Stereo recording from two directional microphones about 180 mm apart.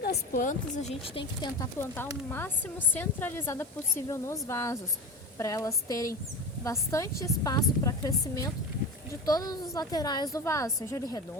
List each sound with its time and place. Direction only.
0.0 s a woman's voice: 55° left (ahead or behind); by 11.2 s 15° left (ahead or behind)